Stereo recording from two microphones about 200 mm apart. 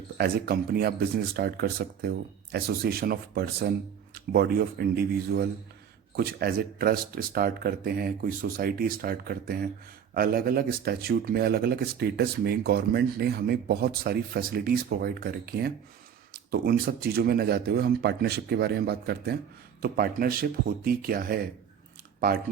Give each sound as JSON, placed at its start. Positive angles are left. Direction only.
{"t": 0.2, "sound": "speech", "side_deg": -50}